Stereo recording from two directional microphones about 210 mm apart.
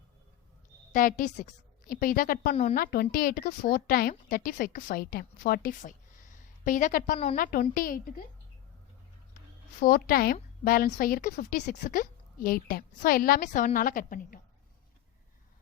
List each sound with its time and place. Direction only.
0.9 s a woman's voice: 40° left (ahead or behind)
9.8 s a woman's voice: 45° left (ahead or behind)